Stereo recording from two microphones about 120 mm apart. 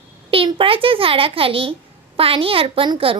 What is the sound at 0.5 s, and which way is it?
A child's voice, 45° right (ahead or behind).